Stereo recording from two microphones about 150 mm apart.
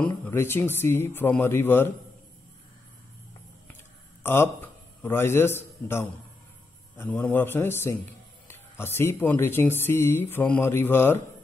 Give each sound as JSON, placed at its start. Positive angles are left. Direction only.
{"t": 0.0, "sound": "speech", "side_deg": 10}
{"t": 4.2, "sound": "speech", "side_deg": 15}